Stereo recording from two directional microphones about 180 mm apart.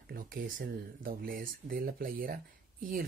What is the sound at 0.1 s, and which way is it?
Speech, 55° right (ahead or behind).